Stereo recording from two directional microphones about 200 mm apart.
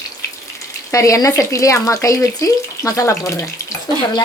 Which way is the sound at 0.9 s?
15° left (ahead or behind).